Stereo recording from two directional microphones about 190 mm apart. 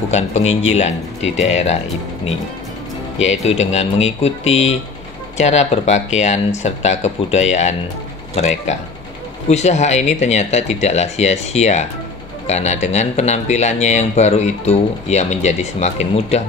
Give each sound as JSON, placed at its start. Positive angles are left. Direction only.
{"t": 0.1, "sound": "speech", "side_deg": 35}
{"t": 3.2, "sound": "speech", "side_deg": 35}